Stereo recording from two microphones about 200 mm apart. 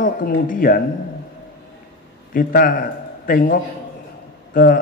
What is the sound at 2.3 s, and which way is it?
A man's voice, 45° left (ahead or behind).